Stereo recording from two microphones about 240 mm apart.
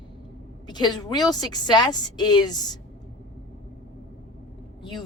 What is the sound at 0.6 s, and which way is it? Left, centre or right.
A woman's voice, centre.